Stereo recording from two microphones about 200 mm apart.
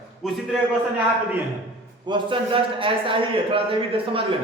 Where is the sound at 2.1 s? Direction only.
25° right (ahead or behind).